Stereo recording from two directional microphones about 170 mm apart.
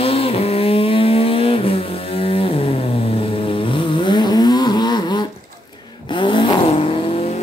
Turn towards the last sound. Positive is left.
turn(degrees=35)  # may be behind; listen again after turning